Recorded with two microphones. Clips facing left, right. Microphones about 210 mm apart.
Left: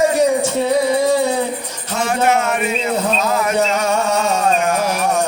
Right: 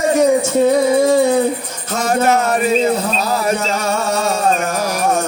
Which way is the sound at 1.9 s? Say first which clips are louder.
Right 2 dB; 40° right (ahead or behind).